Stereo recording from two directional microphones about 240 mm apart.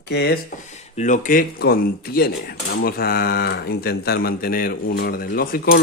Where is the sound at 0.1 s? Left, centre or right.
Left.